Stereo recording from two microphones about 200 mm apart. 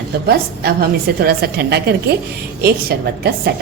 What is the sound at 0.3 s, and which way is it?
A woman's voice, 50° right (ahead or behind).